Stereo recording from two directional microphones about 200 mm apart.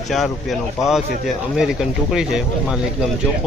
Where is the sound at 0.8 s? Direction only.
Centre (ahead or behind).